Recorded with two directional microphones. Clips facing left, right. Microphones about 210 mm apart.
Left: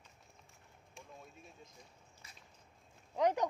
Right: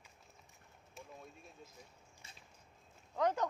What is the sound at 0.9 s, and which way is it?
Speech, 5° right (ahead or behind).